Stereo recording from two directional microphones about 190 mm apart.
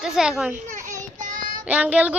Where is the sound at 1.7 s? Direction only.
5° right (ahead or behind).